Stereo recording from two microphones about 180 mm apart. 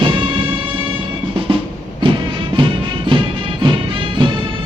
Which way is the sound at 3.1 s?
30° right (ahead or behind).